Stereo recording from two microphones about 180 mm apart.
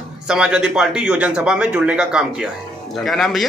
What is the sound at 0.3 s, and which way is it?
Speech, 5° right (ahead or behind).